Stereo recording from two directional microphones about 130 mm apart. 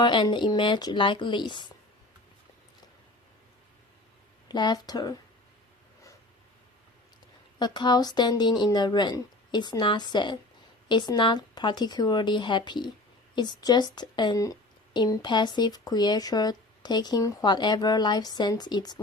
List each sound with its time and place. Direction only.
0.0 s speech: 35° left (ahead or behind)
4.4 s speech: 35° left (ahead or behind)
7.6 s speech: 35° left (ahead or behind)